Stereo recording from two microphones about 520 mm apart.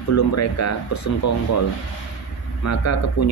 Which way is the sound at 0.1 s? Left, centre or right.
Left.